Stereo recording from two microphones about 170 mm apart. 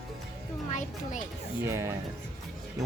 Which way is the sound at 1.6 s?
15° right (ahead or behind).